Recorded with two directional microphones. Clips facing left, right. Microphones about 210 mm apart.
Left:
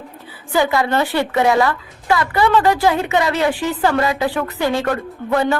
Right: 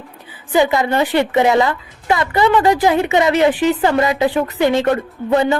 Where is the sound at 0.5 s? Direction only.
20° right (ahead or behind).